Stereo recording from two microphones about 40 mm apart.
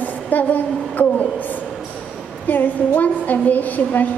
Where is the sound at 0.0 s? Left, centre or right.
Left.